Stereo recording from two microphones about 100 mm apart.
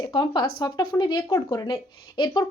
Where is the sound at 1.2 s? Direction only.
30° left (ahead or behind).